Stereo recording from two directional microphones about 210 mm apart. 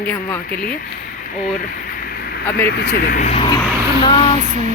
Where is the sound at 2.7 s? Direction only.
45° left (ahead or behind); by 4.4 s 20° left (ahead or behind).